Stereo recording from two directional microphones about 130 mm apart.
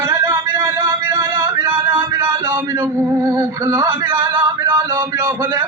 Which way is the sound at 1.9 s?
25° right (ahead or behind).